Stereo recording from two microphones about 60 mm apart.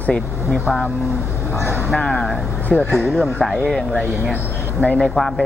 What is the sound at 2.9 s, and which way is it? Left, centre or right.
Speech, centre.